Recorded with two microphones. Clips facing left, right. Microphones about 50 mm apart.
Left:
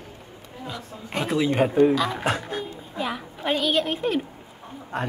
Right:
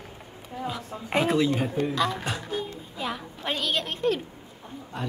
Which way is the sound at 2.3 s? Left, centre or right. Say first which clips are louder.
Left 1 dB; left.